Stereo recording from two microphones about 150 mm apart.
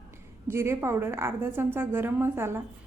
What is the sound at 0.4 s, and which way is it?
A woman's voice, 20° right (ahead or behind).